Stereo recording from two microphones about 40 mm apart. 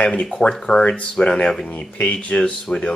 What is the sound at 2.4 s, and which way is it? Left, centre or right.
Speech, left.